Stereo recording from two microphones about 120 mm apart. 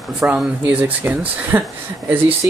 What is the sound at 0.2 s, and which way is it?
Speech, 10° right (ahead or behind).